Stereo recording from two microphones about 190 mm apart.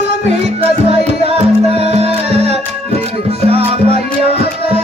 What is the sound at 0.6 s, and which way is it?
Music, 30° right (ahead or behind).